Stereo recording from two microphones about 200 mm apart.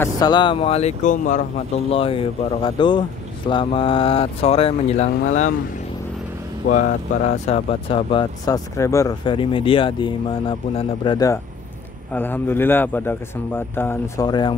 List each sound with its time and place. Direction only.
0.0 s speech: 20° left (ahead or behind); by 1.4 s 40° left (ahead or behind)
1.9 s speech: 25° left (ahead or behind)
6.7 s speech: 40° left (ahead or behind); by 11.3 s 20° left (ahead or behind)
12.1 s speech: 10° left (ahead or behind)